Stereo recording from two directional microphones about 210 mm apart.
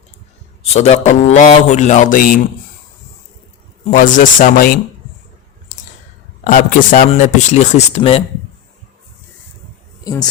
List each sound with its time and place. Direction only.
0.6 s a man's voice: 30° left (ahead or behind)
3.8 s a man's voice: 40° left (ahead or behind)
6.4 s a man's voice: 40° left (ahead or behind)
10.0 s speech: 15° left (ahead or behind)